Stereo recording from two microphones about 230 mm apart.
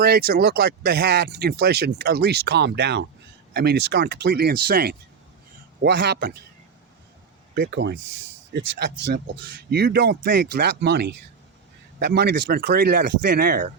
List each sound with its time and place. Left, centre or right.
0.0 s speech: right
7.5 s speech: right